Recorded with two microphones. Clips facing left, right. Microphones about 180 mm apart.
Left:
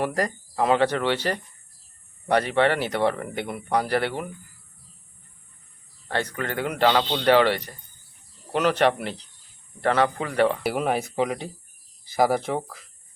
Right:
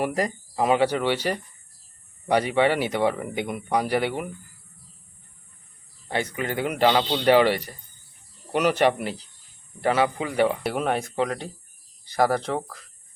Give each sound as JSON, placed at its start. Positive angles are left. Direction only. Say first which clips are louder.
{"t": 0.0, "sound": "speech", "louder": "even", "side_deg": -10}
{"t": 6.1, "sound": "speech", "louder": "right 1 dB", "side_deg": -10}
{"t": 10.6, "sound": "speech", "louder": "left 1 dB", "side_deg": 0}